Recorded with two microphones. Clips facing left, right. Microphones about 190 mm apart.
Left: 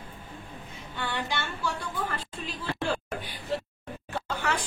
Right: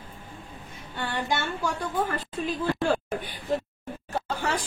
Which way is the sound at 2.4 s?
50° right (ahead or behind).